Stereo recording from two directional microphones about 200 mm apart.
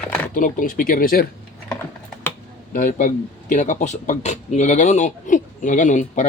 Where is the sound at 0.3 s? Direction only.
40° left (ahead or behind).